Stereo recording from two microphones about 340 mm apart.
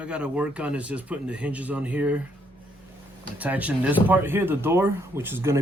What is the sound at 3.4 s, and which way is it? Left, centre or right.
Speech, centre.